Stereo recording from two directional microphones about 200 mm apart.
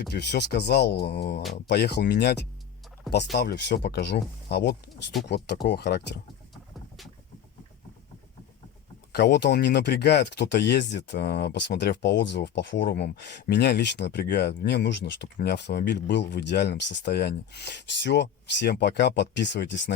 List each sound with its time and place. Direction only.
0.1 s speech: 55° left (ahead or behind)
6.5 s boat: centre (ahead or behind)
9.1 s speech: 55° left (ahead or behind)